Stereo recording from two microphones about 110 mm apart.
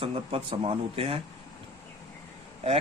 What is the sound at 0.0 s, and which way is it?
Speech, 60° right (ahead or behind).